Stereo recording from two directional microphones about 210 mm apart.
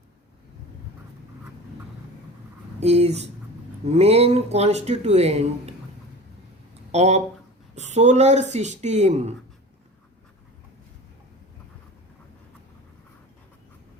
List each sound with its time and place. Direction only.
2.8 s speech: 30° right (ahead or behind)
6.9 s speech: 30° right (ahead or behind)